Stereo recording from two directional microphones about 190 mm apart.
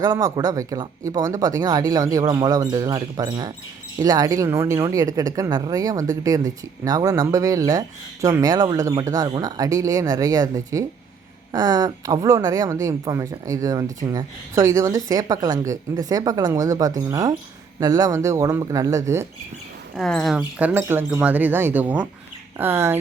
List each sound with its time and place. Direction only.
0.0 s speech: 20° right (ahead or behind)
20.0 s speech: centre (ahead or behind)